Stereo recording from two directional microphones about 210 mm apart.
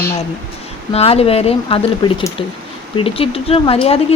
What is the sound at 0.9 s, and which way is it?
Speech, 30° left (ahead or behind).